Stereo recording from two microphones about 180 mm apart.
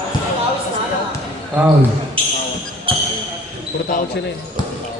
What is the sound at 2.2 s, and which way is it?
Basketball bounce, 30° right (ahead or behind).